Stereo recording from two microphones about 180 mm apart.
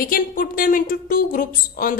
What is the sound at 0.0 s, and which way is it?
A woman's voice, 50° left (ahead or behind).